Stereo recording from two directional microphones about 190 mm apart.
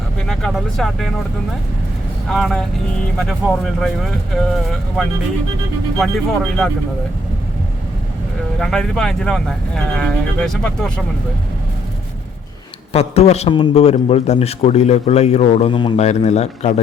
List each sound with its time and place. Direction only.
0.3 s speech: centre (ahead or behind)
2.3 s speech: centre (ahead or behind)
8.5 s speech: centre (ahead or behind)
12.9 s a man's voice: 30° left (ahead or behind)